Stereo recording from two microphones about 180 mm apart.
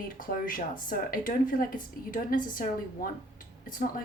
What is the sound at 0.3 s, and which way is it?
Speech, 50° left (ahead or behind).